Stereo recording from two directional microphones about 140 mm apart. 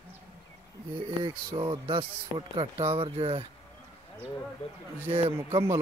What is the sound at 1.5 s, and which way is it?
Speech, 40° right (ahead or behind).